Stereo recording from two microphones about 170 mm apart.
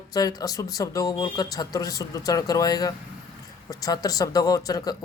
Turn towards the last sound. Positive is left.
turn(degrees=20)  # may be behind; listen again after turning